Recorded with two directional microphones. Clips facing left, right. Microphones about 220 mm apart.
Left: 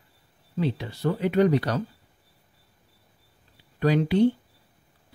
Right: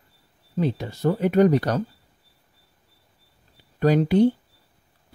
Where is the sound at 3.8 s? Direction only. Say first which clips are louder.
Right 3 dB; 45° right (ahead or behind).